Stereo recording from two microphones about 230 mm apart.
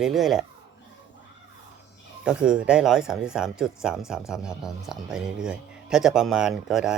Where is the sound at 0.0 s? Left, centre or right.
Centre.